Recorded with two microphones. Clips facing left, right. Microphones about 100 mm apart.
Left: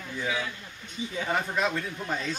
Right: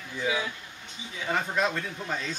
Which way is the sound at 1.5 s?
5° left (ahead or behind).